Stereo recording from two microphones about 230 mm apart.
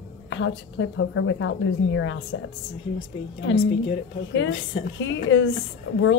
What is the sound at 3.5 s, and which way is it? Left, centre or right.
Speech, left.